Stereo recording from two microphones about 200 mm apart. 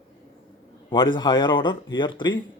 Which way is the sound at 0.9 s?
20° left (ahead or behind).